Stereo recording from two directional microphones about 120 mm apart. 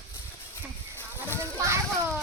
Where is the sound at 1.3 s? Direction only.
20° right (ahead or behind).